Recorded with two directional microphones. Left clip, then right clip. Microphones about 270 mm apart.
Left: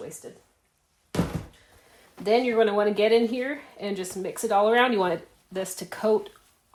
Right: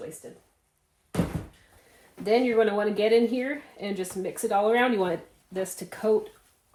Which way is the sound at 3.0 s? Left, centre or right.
Centre.